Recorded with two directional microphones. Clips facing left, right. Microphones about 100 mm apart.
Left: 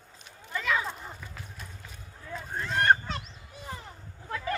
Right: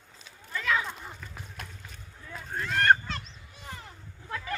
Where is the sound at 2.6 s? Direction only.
20° left (ahead or behind).